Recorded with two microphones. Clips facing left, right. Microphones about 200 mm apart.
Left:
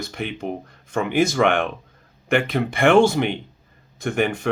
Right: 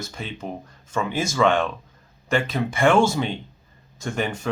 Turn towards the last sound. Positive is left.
turn(degrees=60)  # may be behind; listen again after turning